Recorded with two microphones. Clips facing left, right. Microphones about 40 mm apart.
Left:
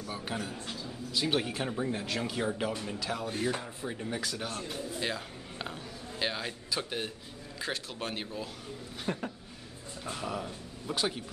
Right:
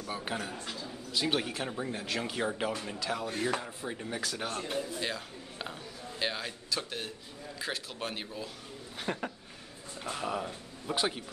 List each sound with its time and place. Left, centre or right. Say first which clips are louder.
0.0 s speech: right 1 dB; centre
1.1 s speech: left 1 dB; centre
4.4 s a man's voice: right 1 dB; centre
5.0 s a sound: left 1 dB; centre
6.7 s a man's voice: left 2 dB; centre
7.5 s speech: left 1 dB; centre
9.0 s speech: even; centre